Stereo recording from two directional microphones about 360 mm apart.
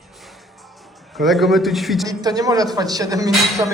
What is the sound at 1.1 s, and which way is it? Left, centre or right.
Speech, centre.